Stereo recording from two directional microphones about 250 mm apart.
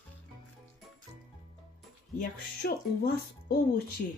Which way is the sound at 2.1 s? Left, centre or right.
Left.